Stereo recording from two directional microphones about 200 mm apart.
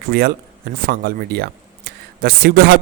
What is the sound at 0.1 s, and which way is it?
Speech, 50° right (ahead or behind).